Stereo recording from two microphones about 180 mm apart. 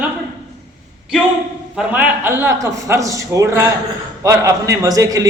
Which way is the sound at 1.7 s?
10° right (ahead or behind).